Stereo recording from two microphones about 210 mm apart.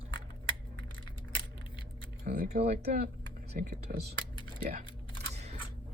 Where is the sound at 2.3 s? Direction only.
35° right (ahead or behind).